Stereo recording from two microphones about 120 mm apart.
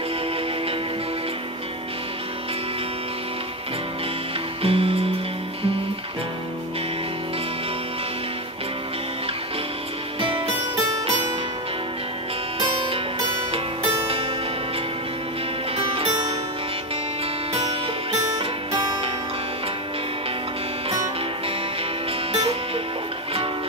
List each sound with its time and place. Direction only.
4.6 s music: 55° right (ahead or behind)
10.2 s music: 50° right (ahead or behind)
12.5 s music: 45° right (ahead or behind)
15.7 s music: 50° right (ahead or behind)
22.3 s music: 55° right (ahead or behind)